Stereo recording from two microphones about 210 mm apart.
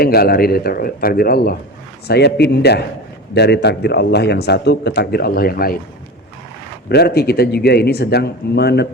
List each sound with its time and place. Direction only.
0.0 s a man's voice: 45° left (ahead or behind)
6.8 s a man's voice: 50° left (ahead or behind)